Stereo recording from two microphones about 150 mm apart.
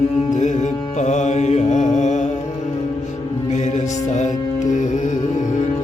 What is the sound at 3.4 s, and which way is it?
Music, 50° left (ahead or behind).